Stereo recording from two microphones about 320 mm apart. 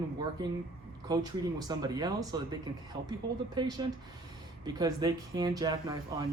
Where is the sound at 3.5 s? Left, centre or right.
Centre.